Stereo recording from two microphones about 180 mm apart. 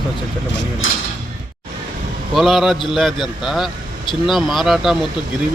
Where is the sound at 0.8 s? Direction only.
90° left.